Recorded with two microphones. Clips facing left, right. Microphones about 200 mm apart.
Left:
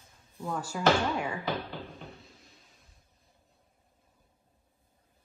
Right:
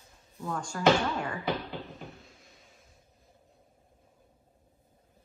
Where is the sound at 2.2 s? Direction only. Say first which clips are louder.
Even; centre (ahead or behind).